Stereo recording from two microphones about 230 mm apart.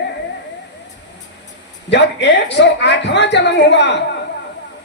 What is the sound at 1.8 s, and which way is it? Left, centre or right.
A man's voice, left.